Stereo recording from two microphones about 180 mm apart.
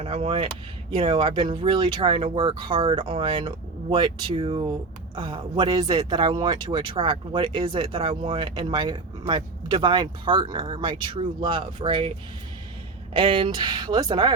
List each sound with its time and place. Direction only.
0.0 s speech: 30° right (ahead or behind)
13.1 s speech: 30° right (ahead or behind)